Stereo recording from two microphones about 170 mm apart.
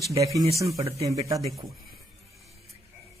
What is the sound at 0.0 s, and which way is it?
Speech, 20° right (ahead or behind).